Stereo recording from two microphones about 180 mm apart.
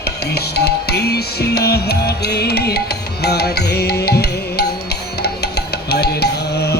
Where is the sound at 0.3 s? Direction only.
65° left (ahead or behind).